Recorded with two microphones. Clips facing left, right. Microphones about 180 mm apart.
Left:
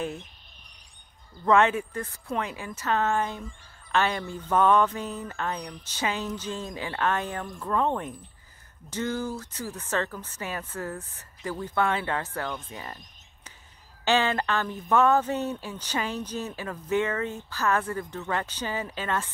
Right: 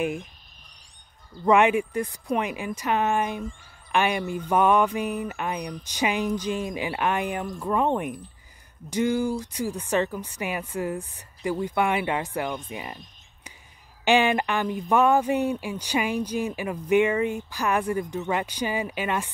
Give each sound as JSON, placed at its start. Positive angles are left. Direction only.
{"t": 0.0, "sound": "speech", "side_deg": -15}
{"t": 1.4, "sound": "speech", "side_deg": -15}